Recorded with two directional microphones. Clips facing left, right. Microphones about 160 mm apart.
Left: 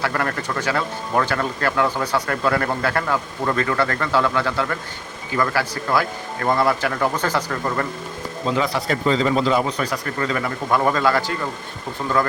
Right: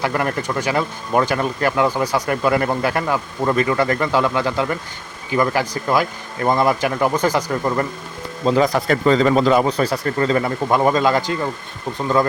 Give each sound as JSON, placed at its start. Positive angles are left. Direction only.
{"t": 0.0, "sound": "speech", "side_deg": -20}
{"t": 8.4, "sound": "speech", "side_deg": -40}
{"t": 9.6, "sound": "speech", "side_deg": -30}